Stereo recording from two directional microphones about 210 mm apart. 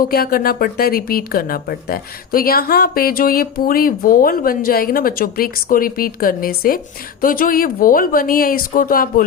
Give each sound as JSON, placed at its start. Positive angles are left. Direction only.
{"t": 0.0, "sound": "speech", "side_deg": 45}